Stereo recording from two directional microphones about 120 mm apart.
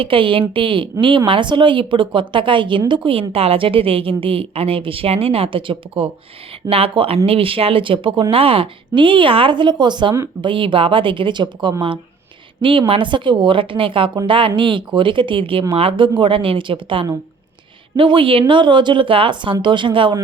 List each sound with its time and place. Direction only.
0.0 s speech: 45° right (ahead or behind)